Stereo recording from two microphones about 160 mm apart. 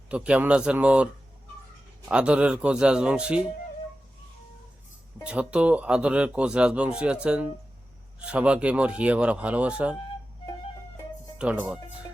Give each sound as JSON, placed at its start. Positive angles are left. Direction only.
{"t": 0.1, "sound": "speech", "side_deg": -5}
{"t": 2.0, "sound": "speech", "side_deg": -5}
{"t": 5.2, "sound": "speech", "side_deg": -5}
{"t": 11.3, "sound": "speech", "side_deg": -10}